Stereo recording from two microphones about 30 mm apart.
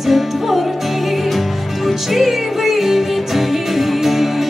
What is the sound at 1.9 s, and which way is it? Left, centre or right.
Music, centre.